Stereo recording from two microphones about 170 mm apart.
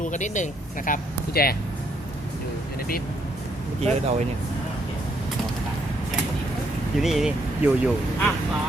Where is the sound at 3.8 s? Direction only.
40° right (ahead or behind).